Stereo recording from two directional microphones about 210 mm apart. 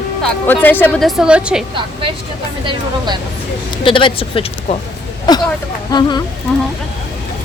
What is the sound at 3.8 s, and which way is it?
Speech, 25° left (ahead or behind).